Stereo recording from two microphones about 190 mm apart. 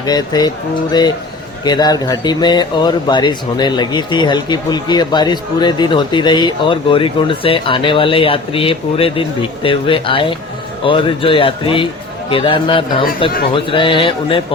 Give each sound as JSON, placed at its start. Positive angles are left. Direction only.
{"t": 0.0, "sound": "speech", "side_deg": 20}
{"t": 1.6, "sound": "speech", "side_deg": 20}